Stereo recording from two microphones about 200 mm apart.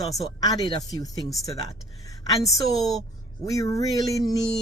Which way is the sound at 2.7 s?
Centre (ahead or behind).